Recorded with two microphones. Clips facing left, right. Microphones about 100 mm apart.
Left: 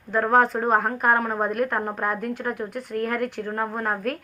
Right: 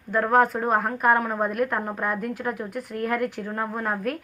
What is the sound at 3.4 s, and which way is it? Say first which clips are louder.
Speech: left 1 dB; 10° left (ahead or behind).